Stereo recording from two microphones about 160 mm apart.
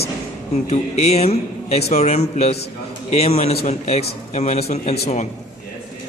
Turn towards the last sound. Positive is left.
turn(degrees=40)  # may be behind; listen again after turning